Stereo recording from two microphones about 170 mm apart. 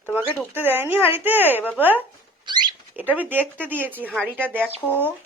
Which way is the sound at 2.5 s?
25° right (ahead or behind).